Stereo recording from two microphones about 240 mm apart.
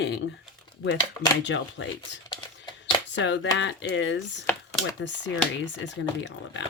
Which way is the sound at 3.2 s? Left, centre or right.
Left.